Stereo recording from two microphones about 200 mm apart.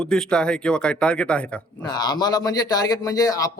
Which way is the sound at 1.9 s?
20° left (ahead or behind).